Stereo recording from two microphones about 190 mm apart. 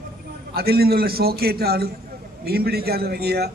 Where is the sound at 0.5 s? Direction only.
55° right (ahead or behind).